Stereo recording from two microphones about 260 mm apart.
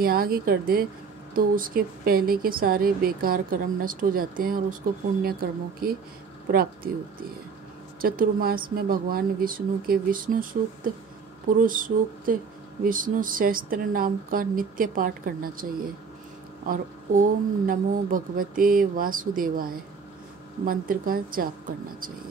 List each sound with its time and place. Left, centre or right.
0.0 s speech: right
8.0 s speech: right